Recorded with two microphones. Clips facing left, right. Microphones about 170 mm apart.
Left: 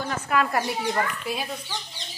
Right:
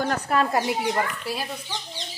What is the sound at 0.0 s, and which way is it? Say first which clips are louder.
Speech: right 2 dB; 35° right (ahead or behind).